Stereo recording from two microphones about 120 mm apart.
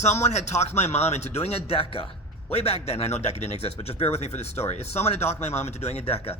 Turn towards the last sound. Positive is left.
turn(degrees=55)  # may be behind; listen again after turning